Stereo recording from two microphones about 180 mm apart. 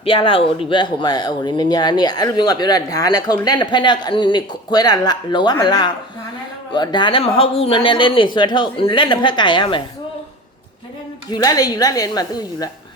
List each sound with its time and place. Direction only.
0.0 s speech: 30° left (ahead or behind)
11.3 s speech: 20° left (ahead or behind)